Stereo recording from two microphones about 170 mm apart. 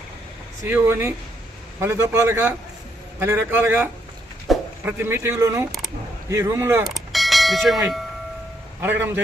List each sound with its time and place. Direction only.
0.6 s a man's voice: 15° right (ahead or behind)
4.5 s a sound: centre (ahead or behind)
4.9 s a man's voice: 15° right (ahead or behind)
6.8 s church bell: centre (ahead or behind)
8.8 s a man's voice: 10° right (ahead or behind)